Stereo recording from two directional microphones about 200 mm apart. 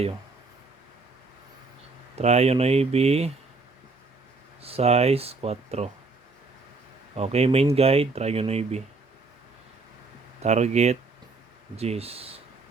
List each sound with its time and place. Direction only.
2.1 s speech: 30° right (ahead or behind)
4.6 s speech: 30° right (ahead or behind)
7.2 s speech: 30° right (ahead or behind)
10.4 s speech: 35° right (ahead or behind)